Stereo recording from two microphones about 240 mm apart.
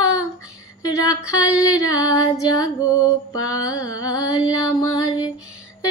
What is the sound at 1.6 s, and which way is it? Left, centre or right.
Female singing, centre.